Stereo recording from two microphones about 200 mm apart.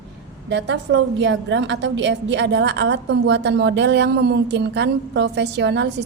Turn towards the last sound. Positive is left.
turn(degrees=-60)  # may be behind; listen again after turning